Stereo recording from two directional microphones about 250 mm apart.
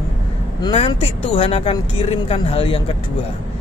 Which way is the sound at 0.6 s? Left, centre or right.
Centre.